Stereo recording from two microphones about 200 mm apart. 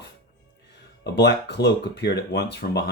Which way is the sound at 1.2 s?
55° left (ahead or behind).